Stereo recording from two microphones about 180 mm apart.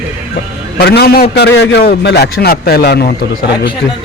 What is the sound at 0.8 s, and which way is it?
A man's voice, 60° left (ahead or behind).